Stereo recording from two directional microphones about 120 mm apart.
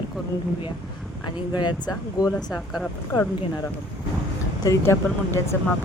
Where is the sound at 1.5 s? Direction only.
35° left (ahead or behind).